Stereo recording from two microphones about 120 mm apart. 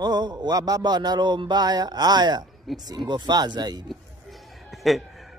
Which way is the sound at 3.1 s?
35° right (ahead or behind).